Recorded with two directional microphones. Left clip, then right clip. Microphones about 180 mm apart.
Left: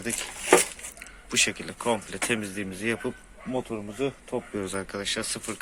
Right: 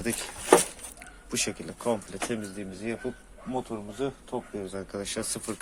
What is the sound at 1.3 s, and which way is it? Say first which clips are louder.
Speech: left 7 dB; 10° right (ahead or behind).